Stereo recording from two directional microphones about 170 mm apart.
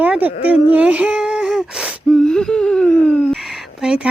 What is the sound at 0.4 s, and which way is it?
Speech, 10° right (ahead or behind).